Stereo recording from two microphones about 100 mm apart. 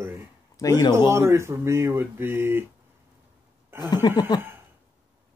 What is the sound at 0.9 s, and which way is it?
Speech, 25° right (ahead or behind).